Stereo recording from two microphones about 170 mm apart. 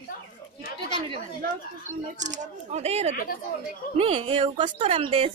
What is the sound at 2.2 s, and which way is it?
A woman's voice, 45° right (ahead or behind).